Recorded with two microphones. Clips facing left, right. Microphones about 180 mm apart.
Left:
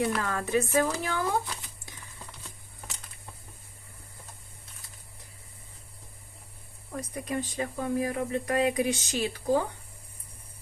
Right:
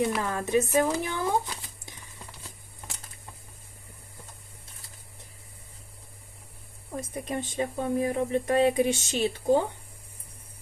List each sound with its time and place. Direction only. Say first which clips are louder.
0.2 s speech: right 2 dB; 20° right (ahead or behind)
6.9 s speech: even; 25° right (ahead or behind)